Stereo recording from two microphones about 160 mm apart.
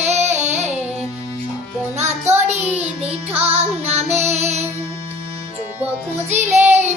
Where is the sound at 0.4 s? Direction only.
45° right (ahead or behind).